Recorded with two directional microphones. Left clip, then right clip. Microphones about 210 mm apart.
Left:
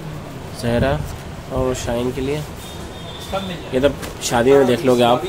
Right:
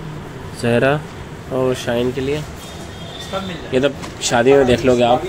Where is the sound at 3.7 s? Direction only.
10° right (ahead or behind).